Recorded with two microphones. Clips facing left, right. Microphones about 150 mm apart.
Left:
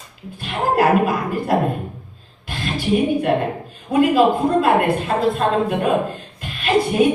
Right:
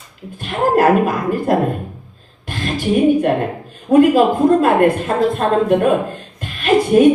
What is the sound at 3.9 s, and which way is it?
A man's voice, 45° right (ahead or behind).